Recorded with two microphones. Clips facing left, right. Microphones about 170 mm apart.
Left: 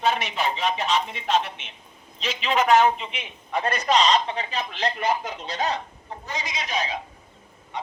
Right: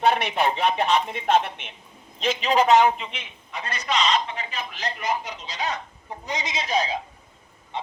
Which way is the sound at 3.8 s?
40° left (ahead or behind).